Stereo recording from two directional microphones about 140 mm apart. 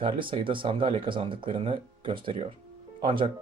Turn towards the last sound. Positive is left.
turn(degrees=-35)  # may be behind; listen again after turning